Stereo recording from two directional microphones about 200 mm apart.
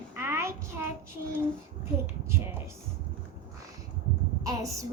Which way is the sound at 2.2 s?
10° right (ahead or behind).